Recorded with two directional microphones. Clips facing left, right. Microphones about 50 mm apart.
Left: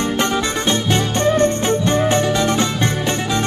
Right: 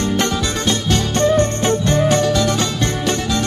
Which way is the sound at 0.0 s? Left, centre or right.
Left.